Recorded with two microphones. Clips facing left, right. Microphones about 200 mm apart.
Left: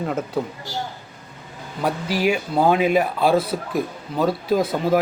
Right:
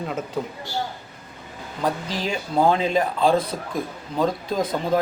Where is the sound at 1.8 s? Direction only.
10° left (ahead or behind).